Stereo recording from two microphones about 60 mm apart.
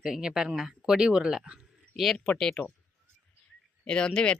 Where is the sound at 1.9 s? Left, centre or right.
Centre.